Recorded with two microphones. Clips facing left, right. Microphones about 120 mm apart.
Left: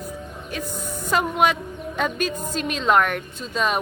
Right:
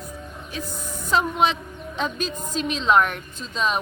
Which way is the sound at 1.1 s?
55° left (ahead or behind).